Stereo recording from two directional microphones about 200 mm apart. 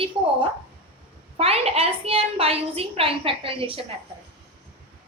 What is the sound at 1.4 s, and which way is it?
A woman's voice, 30° right (ahead or behind).